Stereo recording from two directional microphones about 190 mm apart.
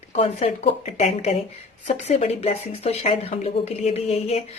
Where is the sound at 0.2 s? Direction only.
30° left (ahead or behind).